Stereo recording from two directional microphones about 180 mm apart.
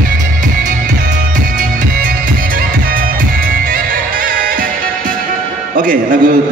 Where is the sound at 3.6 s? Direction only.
50° right (ahead or behind).